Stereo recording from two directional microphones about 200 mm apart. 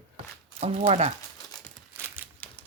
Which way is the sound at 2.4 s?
10° left (ahead or behind).